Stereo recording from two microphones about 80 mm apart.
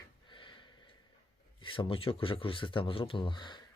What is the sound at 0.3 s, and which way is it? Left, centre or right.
Sniff, left.